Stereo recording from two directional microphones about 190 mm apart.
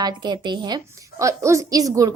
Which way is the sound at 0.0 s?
25° right (ahead or behind).